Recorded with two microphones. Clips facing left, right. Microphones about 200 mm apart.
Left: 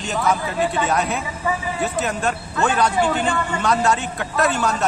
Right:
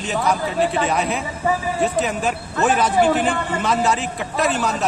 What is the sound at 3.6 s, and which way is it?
Speech, centre (ahead or behind).